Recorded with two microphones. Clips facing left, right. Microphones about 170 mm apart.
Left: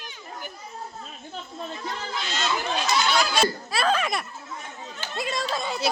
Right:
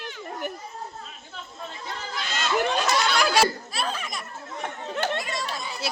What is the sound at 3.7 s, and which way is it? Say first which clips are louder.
Laughter: left 7 dB; 75° left (ahead or behind).